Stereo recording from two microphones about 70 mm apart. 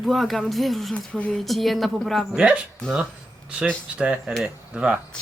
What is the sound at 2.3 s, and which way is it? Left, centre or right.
Speech, centre.